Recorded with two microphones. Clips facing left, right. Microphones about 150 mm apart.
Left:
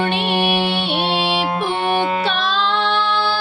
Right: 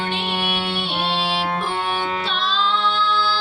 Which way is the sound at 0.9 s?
20° left (ahead or behind).